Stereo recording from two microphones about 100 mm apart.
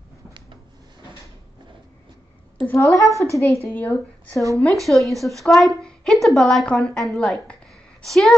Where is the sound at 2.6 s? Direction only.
30° left (ahead or behind).